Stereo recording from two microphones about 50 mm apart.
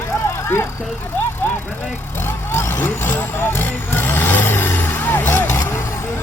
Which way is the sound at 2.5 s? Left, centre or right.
Left.